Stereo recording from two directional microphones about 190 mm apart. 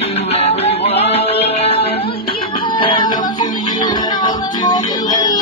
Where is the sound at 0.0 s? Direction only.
35° left (ahead or behind).